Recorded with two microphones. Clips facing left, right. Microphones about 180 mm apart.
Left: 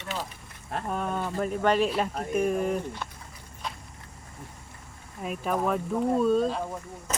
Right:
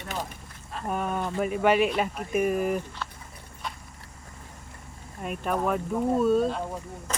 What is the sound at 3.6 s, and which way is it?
Vehicle, centre (ahead or behind).